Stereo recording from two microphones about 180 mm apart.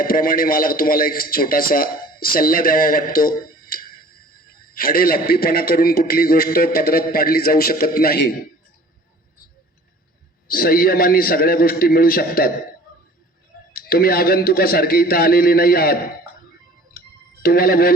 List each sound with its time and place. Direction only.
0.0 s a man's voice: 55° left (ahead or behind)
10.5 s a man's voice: 55° left (ahead or behind)
13.7 s a man's voice: 55° left (ahead or behind)
17.4 s a man's voice: 55° left (ahead or behind)